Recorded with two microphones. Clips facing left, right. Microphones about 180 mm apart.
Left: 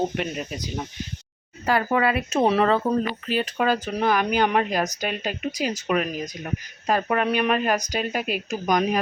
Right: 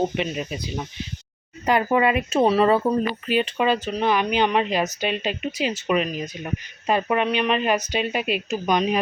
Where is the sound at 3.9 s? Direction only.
5° left (ahead or behind).